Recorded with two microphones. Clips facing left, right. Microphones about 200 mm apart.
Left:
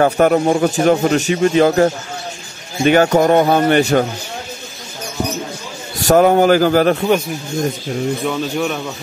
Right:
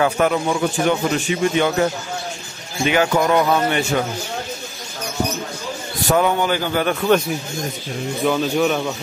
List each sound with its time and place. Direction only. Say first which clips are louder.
0.0 s a man's voice: left 5 dB; 45° left (ahead or behind)
6.0 s a man's voice: left 7 dB; 45° left (ahead or behind)
8.3 s a man's voice: right 2 dB; centre (ahead or behind)